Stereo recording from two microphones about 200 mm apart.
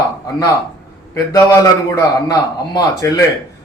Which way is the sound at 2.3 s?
15° left (ahead or behind).